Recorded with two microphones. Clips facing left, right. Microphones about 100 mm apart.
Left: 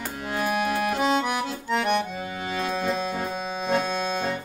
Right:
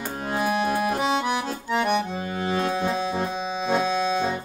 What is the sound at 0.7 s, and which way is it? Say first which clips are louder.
Accordion: even; centre (ahead or behind).